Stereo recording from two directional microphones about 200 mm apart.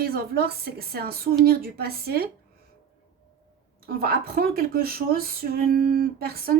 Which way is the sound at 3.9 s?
50° right (ahead or behind).